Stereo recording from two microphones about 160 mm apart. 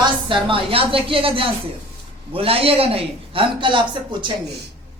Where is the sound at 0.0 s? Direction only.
30° right (ahead or behind).